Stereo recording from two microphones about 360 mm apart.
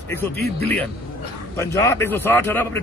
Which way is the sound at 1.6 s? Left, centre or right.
Centre.